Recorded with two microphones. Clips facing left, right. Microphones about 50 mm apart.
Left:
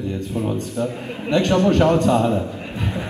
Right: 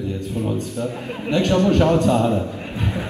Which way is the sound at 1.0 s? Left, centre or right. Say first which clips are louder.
Right 1 dB; right.